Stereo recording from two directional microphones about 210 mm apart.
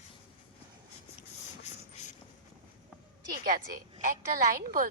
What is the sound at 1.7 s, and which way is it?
Vehicle, 35° left (ahead or behind).